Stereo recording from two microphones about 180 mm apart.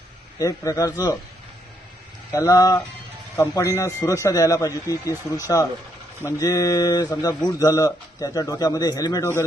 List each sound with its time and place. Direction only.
0.3 s speech: 20° left (ahead or behind)
2.3 s speech: 15° left (ahead or behind)